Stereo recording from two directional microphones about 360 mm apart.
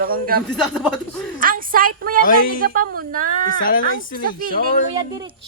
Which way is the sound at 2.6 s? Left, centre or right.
Right.